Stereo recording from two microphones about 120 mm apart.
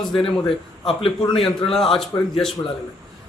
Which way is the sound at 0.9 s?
45° left (ahead or behind).